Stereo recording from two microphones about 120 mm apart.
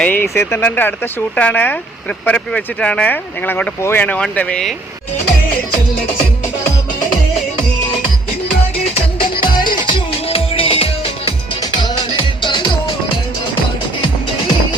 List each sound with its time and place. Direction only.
0.0 s speech: 15° left (ahead or behind)
9.4 s music: 40° left (ahead or behind)
11.6 s music: 40° left (ahead or behind)